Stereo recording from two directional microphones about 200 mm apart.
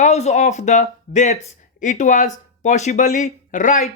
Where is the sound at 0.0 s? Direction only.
35° left (ahead or behind).